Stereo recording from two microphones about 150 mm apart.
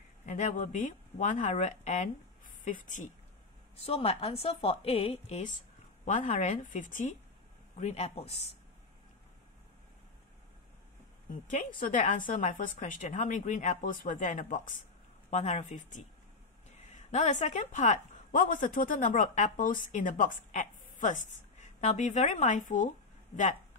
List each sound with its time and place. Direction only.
0.3 s speech: 55° left (ahead or behind)
3.7 s a woman's voice: 40° left (ahead or behind); by 7.1 s 60° left (ahead or behind)
7.8 s speech: 45° left (ahead or behind)
11.8 s a woman's voice: 60° left (ahead or behind)
15.2 s a woman's voice: 50° left (ahead or behind)